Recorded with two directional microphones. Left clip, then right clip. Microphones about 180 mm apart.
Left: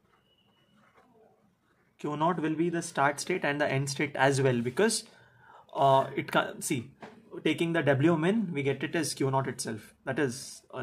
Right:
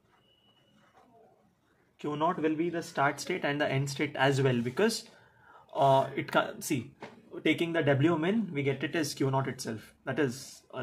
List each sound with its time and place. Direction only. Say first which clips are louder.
2.0 s speech: left 1 dB; 35° left (ahead or behind)
3.1 s speech: left 2 dB; 20° left (ahead or behind)